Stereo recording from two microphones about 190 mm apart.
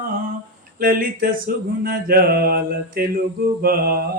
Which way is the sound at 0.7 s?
50° right (ahead or behind).